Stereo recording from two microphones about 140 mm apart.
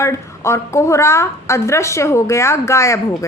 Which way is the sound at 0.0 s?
20° left (ahead or behind).